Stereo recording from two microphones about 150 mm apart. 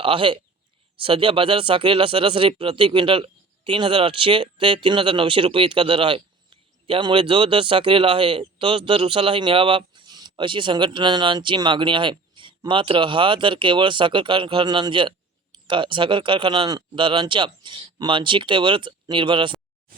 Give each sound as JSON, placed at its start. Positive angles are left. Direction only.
{"t": 0.0, "sound": "speech", "side_deg": -35}